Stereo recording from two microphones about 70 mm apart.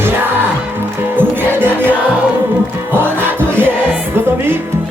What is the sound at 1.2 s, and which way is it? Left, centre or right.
Music, right.